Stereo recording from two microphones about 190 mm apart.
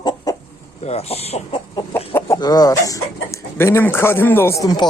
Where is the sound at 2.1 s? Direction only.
15° left (ahead or behind).